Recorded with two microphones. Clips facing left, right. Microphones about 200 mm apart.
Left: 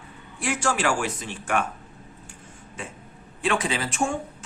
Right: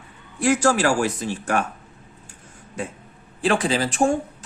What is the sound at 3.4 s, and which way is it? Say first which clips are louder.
Speech: right 5 dB; 35° right (ahead or behind).